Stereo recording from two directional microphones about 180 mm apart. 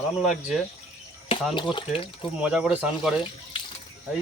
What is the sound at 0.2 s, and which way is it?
Speech, 5° right (ahead or behind).